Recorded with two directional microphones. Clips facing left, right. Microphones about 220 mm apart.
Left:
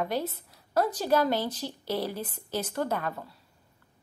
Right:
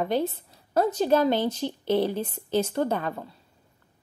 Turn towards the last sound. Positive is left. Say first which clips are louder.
# right 4 dB
turn(degrees=-25)  # may be behind; listen again after turning